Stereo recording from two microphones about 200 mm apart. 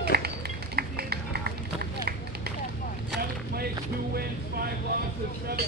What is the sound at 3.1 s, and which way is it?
Boat, 50° right (ahead or behind).